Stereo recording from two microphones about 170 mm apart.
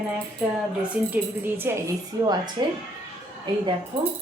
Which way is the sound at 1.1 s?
10° right (ahead or behind).